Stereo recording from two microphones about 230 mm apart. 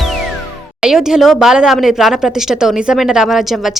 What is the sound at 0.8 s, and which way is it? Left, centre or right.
Speech, centre.